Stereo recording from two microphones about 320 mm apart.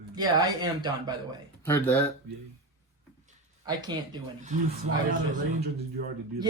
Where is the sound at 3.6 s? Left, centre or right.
Centre.